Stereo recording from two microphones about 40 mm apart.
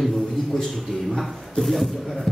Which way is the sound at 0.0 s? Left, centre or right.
Centre.